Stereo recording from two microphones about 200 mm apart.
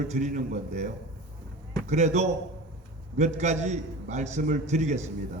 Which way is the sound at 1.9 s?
35° right (ahead or behind).